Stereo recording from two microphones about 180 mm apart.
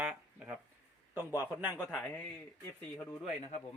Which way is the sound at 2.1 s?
10° left (ahead or behind).